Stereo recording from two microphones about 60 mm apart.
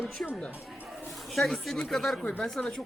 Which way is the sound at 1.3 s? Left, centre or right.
Centre.